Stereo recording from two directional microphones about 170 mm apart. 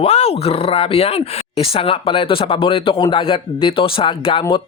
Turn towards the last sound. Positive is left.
turn(degrees=30)  # may be behind; listen again after turning